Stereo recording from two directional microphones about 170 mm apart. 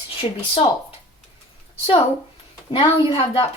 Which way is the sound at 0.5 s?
30° left (ahead or behind).